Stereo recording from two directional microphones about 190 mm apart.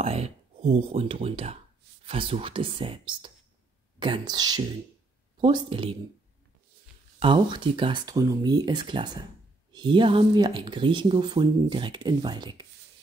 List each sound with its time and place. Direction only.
0.0 s speech: 30° right (ahead or behind)
7.2 s speech: 25° right (ahead or behind)